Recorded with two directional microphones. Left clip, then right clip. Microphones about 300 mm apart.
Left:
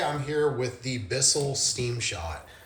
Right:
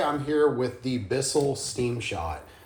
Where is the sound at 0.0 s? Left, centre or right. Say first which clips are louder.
Right 3 dB; centre.